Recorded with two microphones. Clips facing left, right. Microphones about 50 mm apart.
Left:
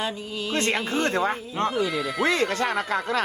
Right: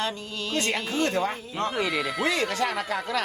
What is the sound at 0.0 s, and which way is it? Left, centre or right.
Speech, centre.